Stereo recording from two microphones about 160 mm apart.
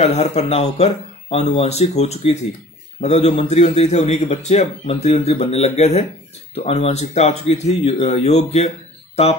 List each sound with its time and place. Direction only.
0.0 s a man's voice: 40° left (ahead or behind)